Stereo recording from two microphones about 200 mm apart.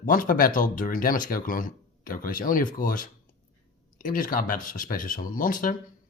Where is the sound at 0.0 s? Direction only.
45° left (ahead or behind).